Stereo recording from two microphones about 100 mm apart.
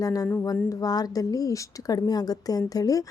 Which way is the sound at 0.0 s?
35° left (ahead or behind).